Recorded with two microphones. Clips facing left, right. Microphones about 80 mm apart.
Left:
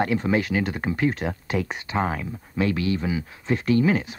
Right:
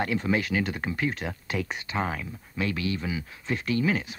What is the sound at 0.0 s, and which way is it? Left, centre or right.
Speech, left.